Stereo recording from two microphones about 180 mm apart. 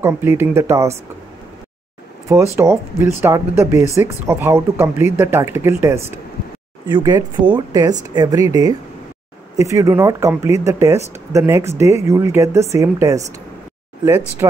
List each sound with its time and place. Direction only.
0.0 s speech: 15° right (ahead or behind)
2.5 s speech: 15° right (ahead or behind)
14.4 s speech: 15° right (ahead or behind)